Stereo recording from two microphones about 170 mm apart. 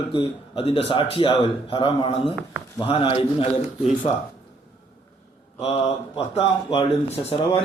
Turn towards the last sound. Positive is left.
turn(degrees=35)  # may be behind; listen again after turning